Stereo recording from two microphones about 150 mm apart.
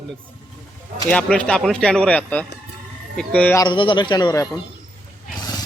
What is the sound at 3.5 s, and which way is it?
Speech, 30° left (ahead or behind).